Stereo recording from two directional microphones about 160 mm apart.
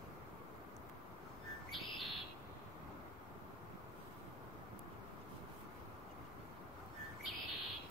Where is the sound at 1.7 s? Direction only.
Centre (ahead or behind).